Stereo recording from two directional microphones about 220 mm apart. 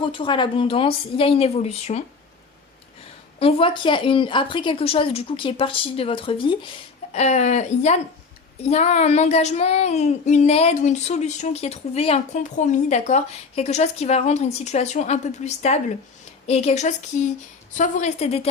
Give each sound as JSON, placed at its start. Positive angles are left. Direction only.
{"t": 0.0, "sound": "a woman's voice", "side_deg": 20}
{"t": 3.4, "sound": "a woman's voice", "side_deg": 25}
{"t": 7.1, "sound": "child singing", "side_deg": 30}